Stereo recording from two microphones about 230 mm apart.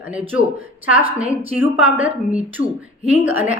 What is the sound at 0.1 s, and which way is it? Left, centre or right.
Speech, centre.